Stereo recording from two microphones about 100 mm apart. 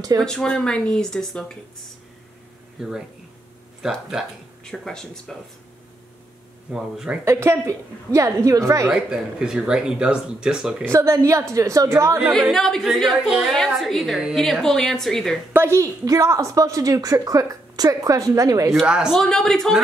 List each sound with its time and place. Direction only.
0.2 s speech: 5° left (ahead or behind)
2.8 s a woman's voice: 5° right (ahead or behind)
4.6 s a woman's voice: 5° left (ahead or behind)
6.7 s speech: 5° right (ahead or behind)
7.2 s a woman's voice: 25° right (ahead or behind)
8.9 s speech: 5° right (ahead or behind)
10.8 s a woman's voice: 30° right (ahead or behind)
12.5 s a woman's voice: 5° left (ahead or behind)
15.5 s a woman's voice: 25° right (ahead or behind)
18.9 s speech: 10° right (ahead or behind)
19.1 s a woman's voice: 5° left (ahead or behind)